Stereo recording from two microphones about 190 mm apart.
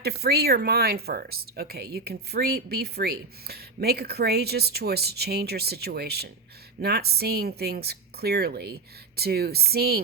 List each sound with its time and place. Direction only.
0.0 s speech: 55° right (ahead or behind)